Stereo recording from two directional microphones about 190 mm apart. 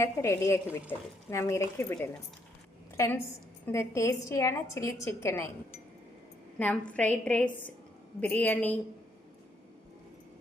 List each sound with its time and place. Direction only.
0.0 s a woman's voice: 15° left (ahead or behind)
3.7 s a woman's voice: 15° left (ahead or behind)
6.6 s a woman's voice: 5° left (ahead or behind)